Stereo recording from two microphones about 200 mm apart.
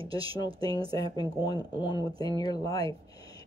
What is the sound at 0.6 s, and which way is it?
Speech, 20° left (ahead or behind).